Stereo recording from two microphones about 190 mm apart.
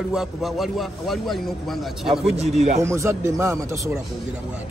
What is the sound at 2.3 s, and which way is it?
Speech, 35° right (ahead or behind).